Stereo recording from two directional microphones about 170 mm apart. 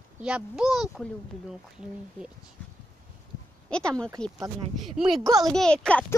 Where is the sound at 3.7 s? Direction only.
5° left (ahead or behind).